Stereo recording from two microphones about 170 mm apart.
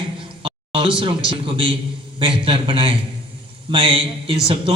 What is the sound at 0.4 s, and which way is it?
A man's voice, 30° right (ahead or behind).